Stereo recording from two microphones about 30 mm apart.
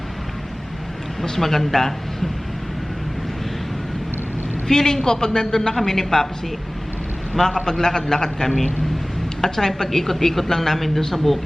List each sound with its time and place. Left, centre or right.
1.2 s speech: centre
4.7 s a man's voice: centre
7.5 s a man's voice: left; by 11.3 s centre